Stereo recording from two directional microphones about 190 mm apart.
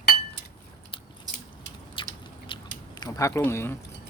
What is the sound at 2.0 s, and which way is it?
Biting, 25° left (ahead or behind).